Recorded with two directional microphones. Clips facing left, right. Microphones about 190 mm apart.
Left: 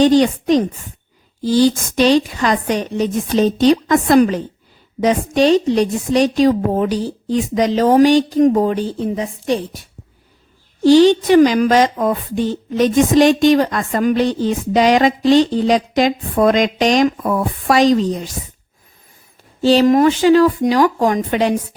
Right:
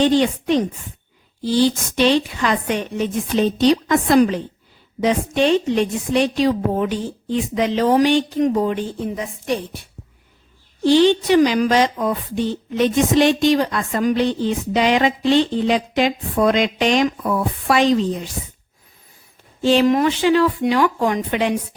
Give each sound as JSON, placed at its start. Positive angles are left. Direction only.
{"t": 0.0, "sound": "a woman's voice", "side_deg": 40}
{"t": 10.8, "sound": "a woman's voice", "side_deg": 40}
{"t": 19.6, "sound": "a woman's voice", "side_deg": 40}